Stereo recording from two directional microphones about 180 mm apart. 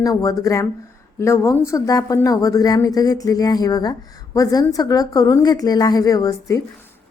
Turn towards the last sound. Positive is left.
turn(degrees=20)  # may be behind; listen again after turning